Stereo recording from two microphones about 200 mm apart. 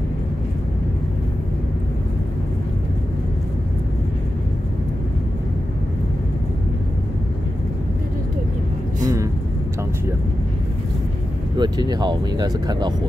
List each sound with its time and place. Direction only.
9.0 s vehicle: 15° right (ahead or behind)
11.5 s speech: 20° right (ahead or behind)